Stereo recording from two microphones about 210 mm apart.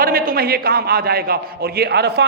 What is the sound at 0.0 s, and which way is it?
A man's voice, 45° right (ahead or behind).